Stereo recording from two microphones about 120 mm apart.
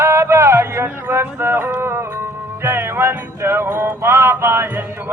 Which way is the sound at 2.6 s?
20° right (ahead or behind).